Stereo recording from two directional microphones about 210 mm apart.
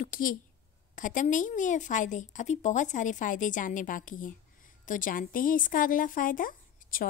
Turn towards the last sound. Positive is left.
turn(degrees=40)  # may be behind; listen again after turning